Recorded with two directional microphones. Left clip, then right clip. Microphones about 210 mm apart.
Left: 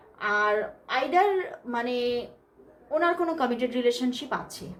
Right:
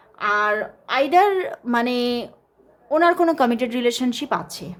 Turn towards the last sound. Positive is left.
turn(degrees=-40)  # may be behind; listen again after turning